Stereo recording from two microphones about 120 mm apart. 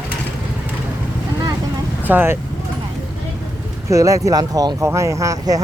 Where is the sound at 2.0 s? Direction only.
15° right (ahead or behind).